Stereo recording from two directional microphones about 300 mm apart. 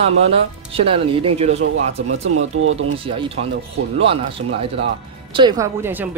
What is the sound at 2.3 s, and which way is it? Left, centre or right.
Speech, right.